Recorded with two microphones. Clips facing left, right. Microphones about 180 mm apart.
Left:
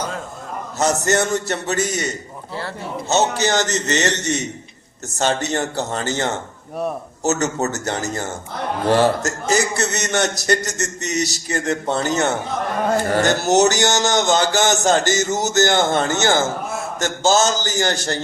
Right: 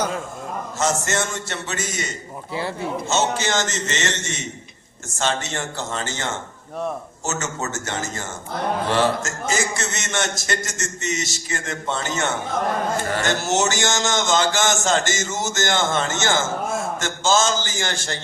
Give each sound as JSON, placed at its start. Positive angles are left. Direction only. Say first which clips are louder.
{"t": 0.8, "sound": "a man's voice", "louder": "left 5 dB", "side_deg": 40}
{"t": 3.1, "sound": "a man's voice", "louder": "left 5 dB", "side_deg": 40}